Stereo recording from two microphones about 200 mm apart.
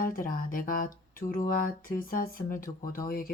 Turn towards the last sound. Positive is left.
turn(degrees=45)  # may be behind; listen again after turning